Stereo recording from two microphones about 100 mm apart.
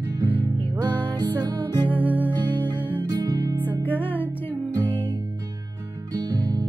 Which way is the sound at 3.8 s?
20° left (ahead or behind).